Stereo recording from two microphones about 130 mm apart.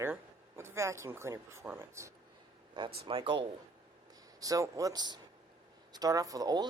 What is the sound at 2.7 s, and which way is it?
Speech, 45° right (ahead or behind).